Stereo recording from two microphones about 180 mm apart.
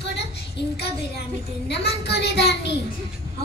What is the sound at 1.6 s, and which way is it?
Speech, 65° left (ahead or behind).